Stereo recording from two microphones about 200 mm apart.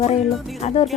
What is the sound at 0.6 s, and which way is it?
Speech, 30° left (ahead or behind).